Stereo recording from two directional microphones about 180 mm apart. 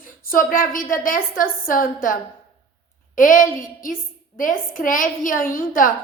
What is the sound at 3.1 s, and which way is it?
A woman's voice, 50° left (ahead or behind).